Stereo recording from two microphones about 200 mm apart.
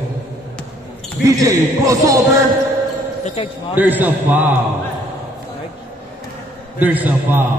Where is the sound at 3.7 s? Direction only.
10° right (ahead or behind).